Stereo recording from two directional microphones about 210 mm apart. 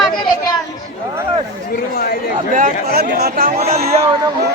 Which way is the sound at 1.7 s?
45° left (ahead or behind).